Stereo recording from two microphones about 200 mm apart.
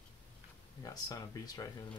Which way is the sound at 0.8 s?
20° left (ahead or behind).